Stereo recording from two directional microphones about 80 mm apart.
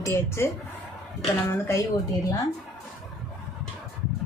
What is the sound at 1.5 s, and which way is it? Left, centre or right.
Speech, left.